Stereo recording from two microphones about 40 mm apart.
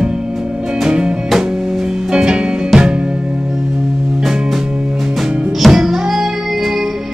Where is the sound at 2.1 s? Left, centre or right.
Right.